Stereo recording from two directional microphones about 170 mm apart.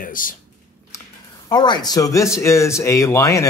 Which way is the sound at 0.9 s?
20° left (ahead or behind).